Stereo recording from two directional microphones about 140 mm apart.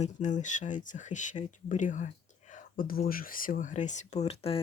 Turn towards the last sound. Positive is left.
turn(degrees=45)  # may be behind; listen again after turning